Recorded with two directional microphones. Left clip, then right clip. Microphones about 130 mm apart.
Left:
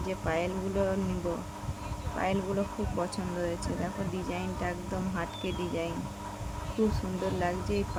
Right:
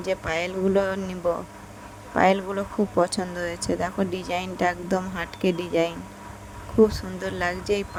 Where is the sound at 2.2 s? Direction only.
90° right.